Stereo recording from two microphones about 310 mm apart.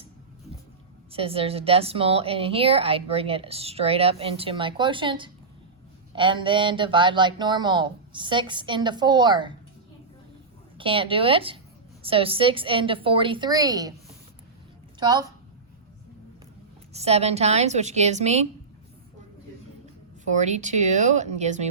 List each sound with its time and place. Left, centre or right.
1.1 s a woman's voice: centre
10.8 s a woman's voice: centre
14.9 s a woman's voice: centre
16.9 s a woman's voice: centre
20.2 s a woman's voice: right